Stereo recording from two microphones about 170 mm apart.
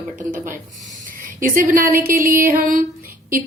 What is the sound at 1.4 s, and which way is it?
A woman's voice, 55° right (ahead or behind).